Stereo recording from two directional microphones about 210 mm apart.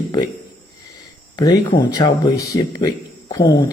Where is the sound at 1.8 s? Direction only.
20° left (ahead or behind).